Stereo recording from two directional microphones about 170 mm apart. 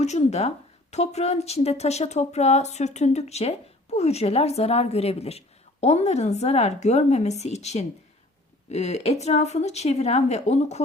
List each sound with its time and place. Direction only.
0.0 s speech: 40° left (ahead or behind)